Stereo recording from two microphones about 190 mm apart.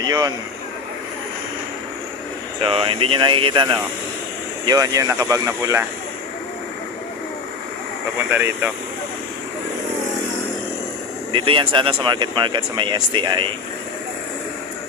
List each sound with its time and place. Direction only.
0.0 s speech: 20° right (ahead or behind)
2.6 s speech: 30° right (ahead or behind)
8.3 s speech: 10° right (ahead or behind)
11.3 s speech: 25° right (ahead or behind)